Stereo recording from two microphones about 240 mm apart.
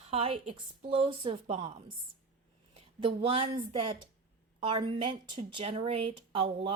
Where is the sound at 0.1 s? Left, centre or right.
Right.